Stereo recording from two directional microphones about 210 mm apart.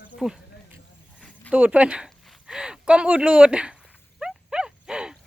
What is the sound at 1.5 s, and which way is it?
Speech, 5° right (ahead or behind).